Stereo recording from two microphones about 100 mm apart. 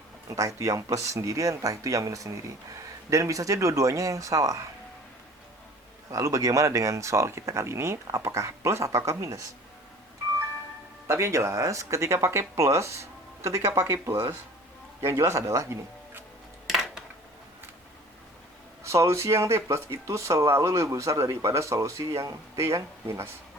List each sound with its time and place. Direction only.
0.3 s speech: 35° right (ahead or behind)
6.1 s speech: 30° right (ahead or behind)
11.1 s speech: 30° right (ahead or behind)
16.6 s a sound: 5° right (ahead or behind)
18.8 s speech: 30° right (ahead or behind)